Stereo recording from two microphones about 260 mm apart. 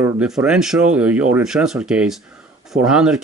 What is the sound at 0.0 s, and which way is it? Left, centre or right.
Speech, centre.